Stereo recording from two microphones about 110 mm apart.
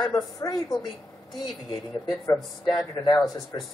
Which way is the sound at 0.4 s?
35° left (ahead or behind).